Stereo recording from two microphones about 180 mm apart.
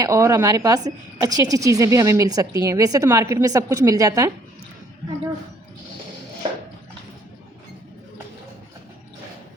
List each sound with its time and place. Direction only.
0.0 s a woman's voice: 20° right (ahead or behind)